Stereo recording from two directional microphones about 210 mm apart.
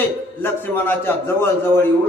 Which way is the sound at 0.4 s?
10° left (ahead or behind).